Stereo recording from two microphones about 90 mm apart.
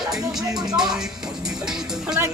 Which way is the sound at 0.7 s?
5° right (ahead or behind).